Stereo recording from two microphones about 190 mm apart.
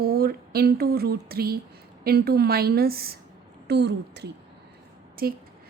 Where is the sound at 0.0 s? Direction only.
55° right (ahead or behind).